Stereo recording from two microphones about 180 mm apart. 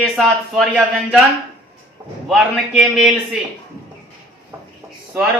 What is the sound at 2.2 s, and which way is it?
Speech, centre (ahead or behind).